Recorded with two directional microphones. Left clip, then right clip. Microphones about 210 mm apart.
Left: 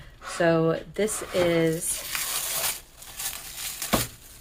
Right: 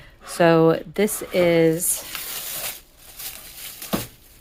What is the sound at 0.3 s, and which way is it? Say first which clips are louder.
Speech: right 7 dB; 45° right (ahead or behind).